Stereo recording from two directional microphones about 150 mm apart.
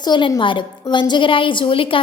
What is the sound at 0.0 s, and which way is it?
A woman's voice, 30° left (ahead or behind).